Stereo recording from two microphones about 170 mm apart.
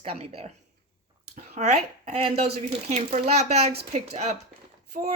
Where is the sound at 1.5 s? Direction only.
40° right (ahead or behind).